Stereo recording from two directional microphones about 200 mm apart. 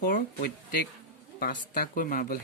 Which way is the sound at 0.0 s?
45° left (ahead or behind).